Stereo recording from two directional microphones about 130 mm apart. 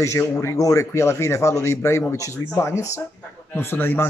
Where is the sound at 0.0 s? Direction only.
20° left (ahead or behind).